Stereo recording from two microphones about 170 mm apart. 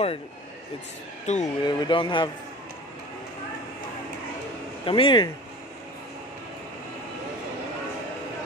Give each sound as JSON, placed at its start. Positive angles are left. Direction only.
{"t": 1.2, "sound": "speech", "side_deg": 45}
{"t": 1.6, "sound": "speech", "side_deg": 25}
{"t": 4.8, "sound": "speech", "side_deg": 30}